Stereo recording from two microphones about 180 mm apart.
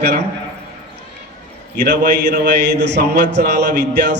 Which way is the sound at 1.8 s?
50° right (ahead or behind).